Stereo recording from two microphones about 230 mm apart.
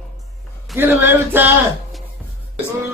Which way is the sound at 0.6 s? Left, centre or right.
Centre.